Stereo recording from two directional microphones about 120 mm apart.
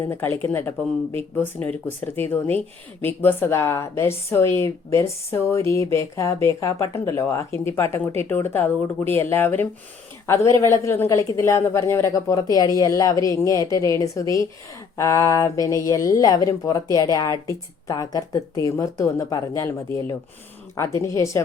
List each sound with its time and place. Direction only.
0.0 s speech: 20° left (ahead or behind)